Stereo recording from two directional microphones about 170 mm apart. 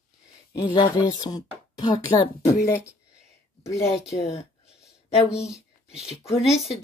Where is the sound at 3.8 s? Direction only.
40° left (ahead or behind).